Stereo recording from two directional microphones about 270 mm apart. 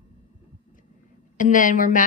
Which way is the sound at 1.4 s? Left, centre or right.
Left.